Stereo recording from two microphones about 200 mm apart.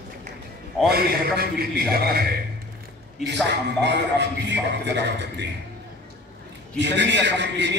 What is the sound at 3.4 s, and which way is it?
A man's voice, 60° right (ahead or behind).